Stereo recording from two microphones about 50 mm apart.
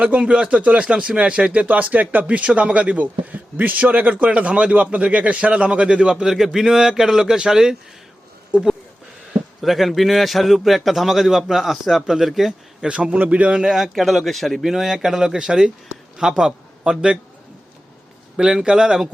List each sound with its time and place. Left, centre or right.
0.0 s speech: right
8.5 s speech: right
9.6 s a man's voice: centre
12.8 s a man's voice: right
13.1 s speech: right
13.7 s a man's voice: centre
18.3 s speech: centre